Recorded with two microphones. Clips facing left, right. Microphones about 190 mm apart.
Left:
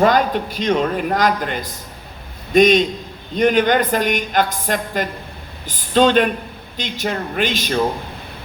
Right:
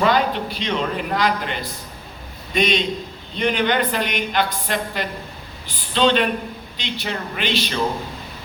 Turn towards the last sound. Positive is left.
turn(degrees=45)  # may be behind; listen again after turning